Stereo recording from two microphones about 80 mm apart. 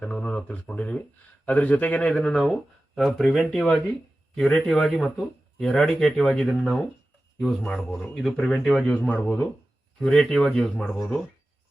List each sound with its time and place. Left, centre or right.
0.0 s speech: centre